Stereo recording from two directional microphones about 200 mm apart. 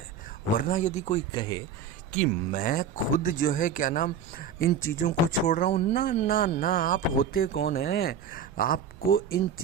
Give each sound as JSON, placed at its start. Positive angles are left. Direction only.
{"t": 0.5, "sound": "speech", "side_deg": 40}
{"t": 2.5, "sound": "speech", "side_deg": 45}